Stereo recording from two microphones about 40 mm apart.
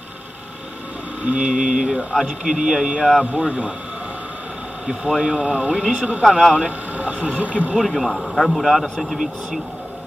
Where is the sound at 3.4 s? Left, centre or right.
Right.